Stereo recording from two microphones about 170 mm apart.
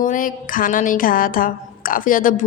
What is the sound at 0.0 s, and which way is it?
A woman's voice, 50° left (ahead or behind).